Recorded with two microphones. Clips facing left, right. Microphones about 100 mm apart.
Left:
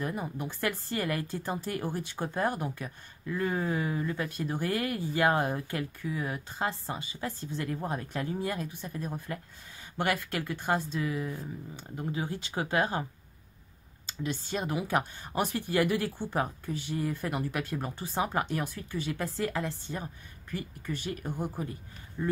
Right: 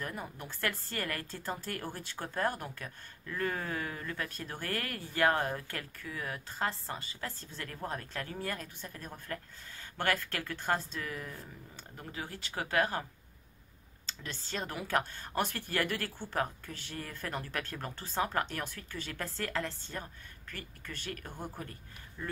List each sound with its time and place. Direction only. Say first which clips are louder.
0.0 s speech: left 7 dB; 15° left (ahead or behind)
14.0 s speech: left 10 dB; 15° left (ahead or behind)